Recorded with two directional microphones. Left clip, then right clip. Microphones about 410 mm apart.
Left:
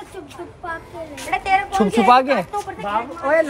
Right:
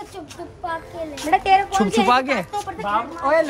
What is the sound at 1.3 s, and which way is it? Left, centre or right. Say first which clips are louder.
Speech: right 2 dB; centre.